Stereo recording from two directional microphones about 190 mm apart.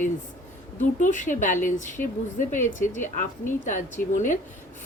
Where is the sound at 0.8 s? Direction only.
40° left (ahead or behind).